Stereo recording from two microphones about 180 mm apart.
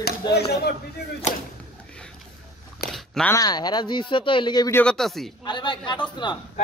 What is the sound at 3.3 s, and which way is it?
Speech, 20° left (ahead or behind).